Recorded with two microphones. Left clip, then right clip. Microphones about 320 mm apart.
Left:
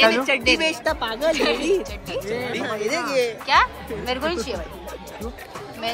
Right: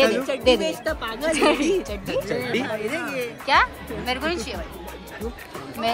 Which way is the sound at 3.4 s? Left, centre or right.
Centre.